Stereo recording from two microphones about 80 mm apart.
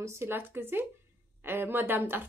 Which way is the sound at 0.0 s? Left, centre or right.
Right.